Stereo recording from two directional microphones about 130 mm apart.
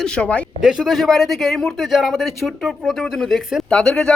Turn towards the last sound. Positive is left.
turn(degrees=5)  # may be behind; listen again after turning